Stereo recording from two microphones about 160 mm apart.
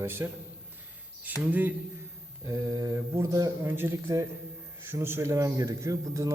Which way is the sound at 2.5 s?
20° right (ahead or behind).